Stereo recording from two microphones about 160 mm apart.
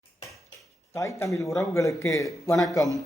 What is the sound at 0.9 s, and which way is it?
Speech, 20° left (ahead or behind).